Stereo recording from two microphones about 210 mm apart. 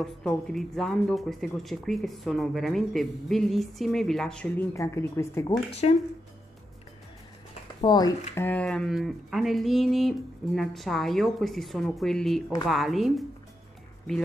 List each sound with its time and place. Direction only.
0.0 s speech: centre (ahead or behind)
5.8 s speech: 30° left (ahead or behind)
7.8 s speech: 20° left (ahead or behind)
8.4 s speech: 5° left (ahead or behind)